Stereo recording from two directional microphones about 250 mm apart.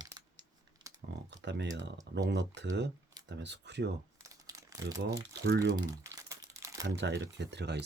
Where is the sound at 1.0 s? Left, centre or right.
Right.